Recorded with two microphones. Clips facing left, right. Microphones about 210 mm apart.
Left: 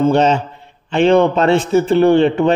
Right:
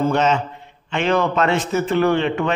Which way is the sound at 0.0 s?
30° left (ahead or behind).